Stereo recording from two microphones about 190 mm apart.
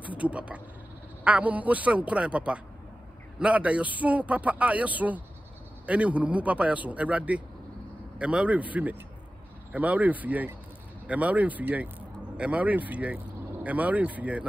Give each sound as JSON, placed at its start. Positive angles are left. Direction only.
{"t": 0.0, "sound": "a man's voice", "side_deg": -5}